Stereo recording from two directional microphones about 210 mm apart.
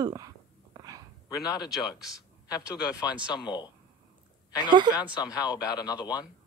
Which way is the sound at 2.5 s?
20° left (ahead or behind).